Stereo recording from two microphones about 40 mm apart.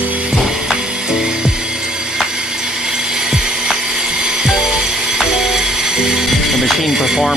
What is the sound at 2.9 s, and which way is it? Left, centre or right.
Music, centre.